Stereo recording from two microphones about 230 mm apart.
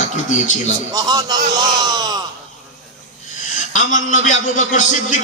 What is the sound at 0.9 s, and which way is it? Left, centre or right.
A man's voice, centre.